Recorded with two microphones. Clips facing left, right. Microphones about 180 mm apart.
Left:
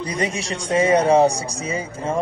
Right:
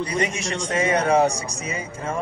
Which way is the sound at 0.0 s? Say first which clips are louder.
Even; 35° left (ahead or behind).